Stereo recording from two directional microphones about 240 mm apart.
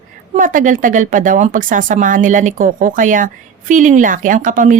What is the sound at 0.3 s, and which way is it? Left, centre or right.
A woman's voice, right.